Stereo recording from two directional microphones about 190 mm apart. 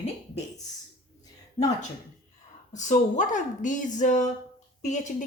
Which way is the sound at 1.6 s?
35° left (ahead or behind).